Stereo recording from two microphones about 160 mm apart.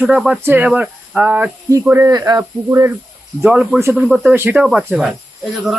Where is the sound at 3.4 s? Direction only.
5° right (ahead or behind).